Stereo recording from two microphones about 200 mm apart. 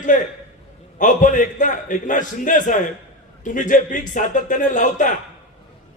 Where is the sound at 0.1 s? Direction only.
40° left (ahead or behind).